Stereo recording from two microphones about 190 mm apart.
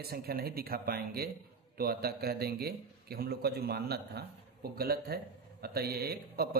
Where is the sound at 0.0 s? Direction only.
55° right (ahead or behind).